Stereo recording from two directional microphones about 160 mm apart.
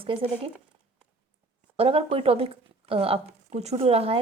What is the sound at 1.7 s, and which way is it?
Speech, 35° right (ahead or behind).